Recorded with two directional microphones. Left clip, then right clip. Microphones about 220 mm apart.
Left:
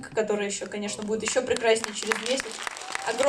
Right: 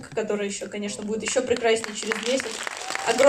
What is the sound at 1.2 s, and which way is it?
Speech, 50° left (ahead or behind).